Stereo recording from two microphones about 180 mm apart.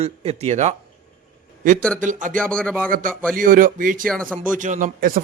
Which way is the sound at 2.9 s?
50° right (ahead or behind).